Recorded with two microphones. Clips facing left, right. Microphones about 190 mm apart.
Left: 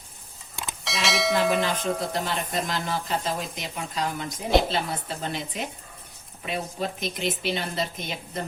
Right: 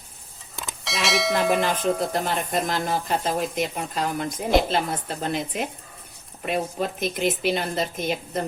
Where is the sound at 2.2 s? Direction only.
50° right (ahead or behind).